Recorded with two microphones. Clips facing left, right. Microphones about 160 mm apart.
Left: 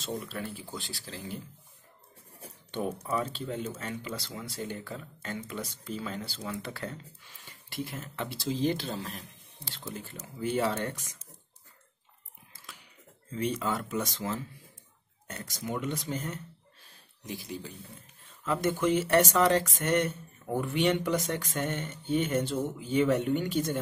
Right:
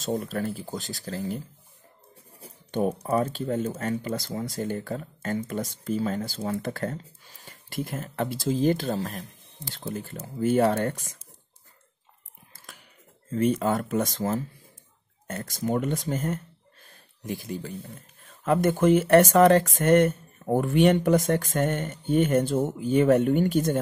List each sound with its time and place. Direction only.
0.0 s speech: 45° right (ahead or behind)
2.4 s speech: 40° right (ahead or behind)
13.3 s speech: 50° right (ahead or behind)
16.8 s a sound: 50° right (ahead or behind)
18.4 s speech: 50° right (ahead or behind)